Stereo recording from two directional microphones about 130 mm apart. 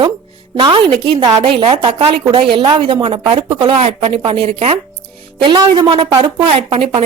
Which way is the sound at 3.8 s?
55° right (ahead or behind).